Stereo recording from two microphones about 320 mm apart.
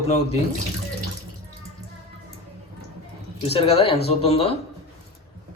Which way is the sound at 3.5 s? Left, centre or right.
Centre.